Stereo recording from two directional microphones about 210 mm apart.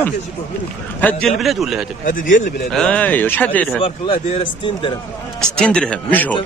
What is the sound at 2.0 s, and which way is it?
Speech, 40° left (ahead or behind).